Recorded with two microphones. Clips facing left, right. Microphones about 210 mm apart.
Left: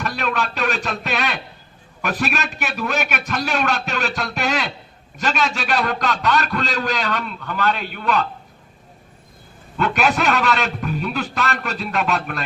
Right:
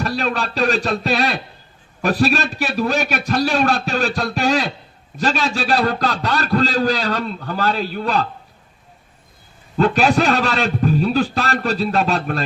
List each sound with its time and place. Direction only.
0.0 s a man's voice: 35° right (ahead or behind)
9.7 s a man's voice: 35° right (ahead or behind)